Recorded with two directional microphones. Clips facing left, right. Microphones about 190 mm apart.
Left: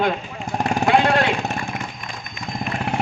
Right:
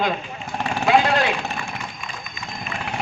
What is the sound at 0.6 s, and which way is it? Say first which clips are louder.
Vehicle: left 1 dB; 50° left (ahead or behind).